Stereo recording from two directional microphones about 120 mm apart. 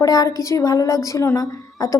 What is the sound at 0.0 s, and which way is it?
A woman's voice, 30° left (ahead or behind).